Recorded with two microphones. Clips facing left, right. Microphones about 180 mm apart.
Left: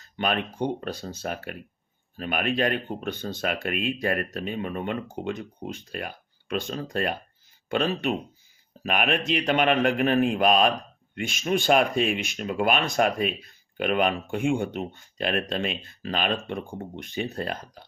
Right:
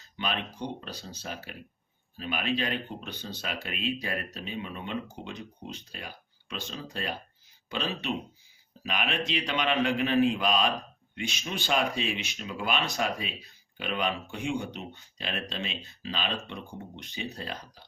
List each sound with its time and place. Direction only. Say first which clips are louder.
0.2 s speech: left 7 dB; 55° left (ahead or behind)